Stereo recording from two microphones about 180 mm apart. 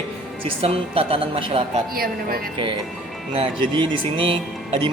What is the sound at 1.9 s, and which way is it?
Speech, 55° right (ahead or behind).